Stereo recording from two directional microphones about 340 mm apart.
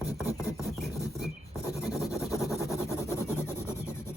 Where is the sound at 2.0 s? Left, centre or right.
Centre.